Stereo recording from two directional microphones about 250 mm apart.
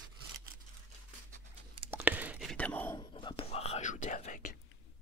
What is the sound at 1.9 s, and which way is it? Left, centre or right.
Whispering, centre.